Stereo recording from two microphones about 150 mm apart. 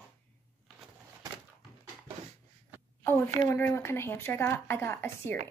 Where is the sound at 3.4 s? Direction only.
15° left (ahead or behind).